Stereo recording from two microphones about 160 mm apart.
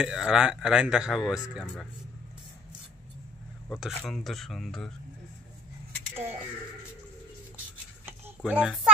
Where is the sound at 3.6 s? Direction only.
Centre (ahead or behind).